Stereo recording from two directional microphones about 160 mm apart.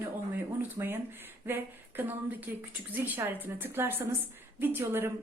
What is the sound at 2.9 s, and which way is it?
A woman's voice, 10° right (ahead or behind).